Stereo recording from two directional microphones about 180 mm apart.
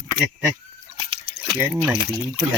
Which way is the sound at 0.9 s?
25° right (ahead or behind).